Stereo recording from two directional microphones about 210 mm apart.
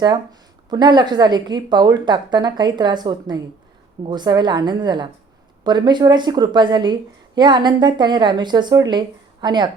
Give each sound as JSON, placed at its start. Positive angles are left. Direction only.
{"t": 0.7, "sound": "a woman's voice", "side_deg": -20}